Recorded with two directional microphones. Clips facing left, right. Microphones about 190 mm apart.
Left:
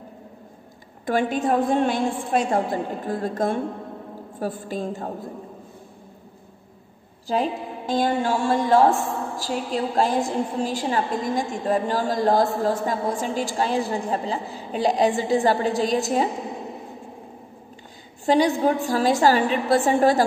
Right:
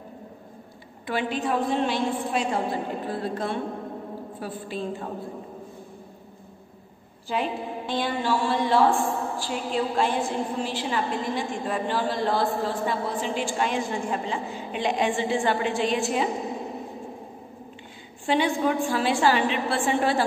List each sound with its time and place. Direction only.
1.0 s a woman's voice: 45° left (ahead or behind)
7.2 s a woman's voice: 40° left (ahead or behind)
18.2 s a woman's voice: 40° left (ahead or behind)